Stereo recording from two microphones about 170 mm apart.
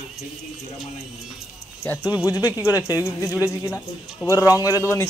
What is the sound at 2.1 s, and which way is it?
Speech, 10° right (ahead or behind).